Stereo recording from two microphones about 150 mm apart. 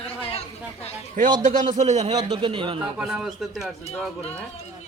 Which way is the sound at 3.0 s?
5° right (ahead or behind).